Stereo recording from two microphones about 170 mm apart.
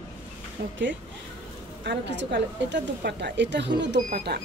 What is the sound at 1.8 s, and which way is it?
Speech, 85° right.